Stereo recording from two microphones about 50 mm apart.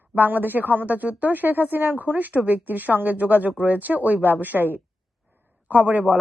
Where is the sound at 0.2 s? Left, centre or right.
Right.